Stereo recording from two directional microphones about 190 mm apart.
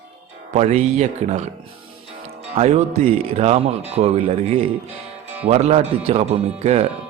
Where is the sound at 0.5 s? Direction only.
35° right (ahead or behind).